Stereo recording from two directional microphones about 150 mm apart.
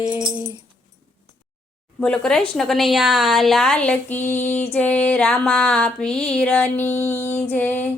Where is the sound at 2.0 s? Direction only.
5° left (ahead or behind).